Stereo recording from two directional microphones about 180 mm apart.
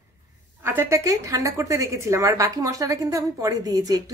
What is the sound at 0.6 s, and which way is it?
A woman's voice, 10° right (ahead or behind).